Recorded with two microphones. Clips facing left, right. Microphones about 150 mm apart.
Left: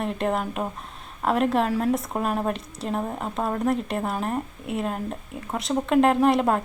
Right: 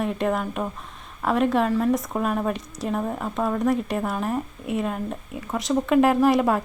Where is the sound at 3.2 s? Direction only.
30° left (ahead or behind).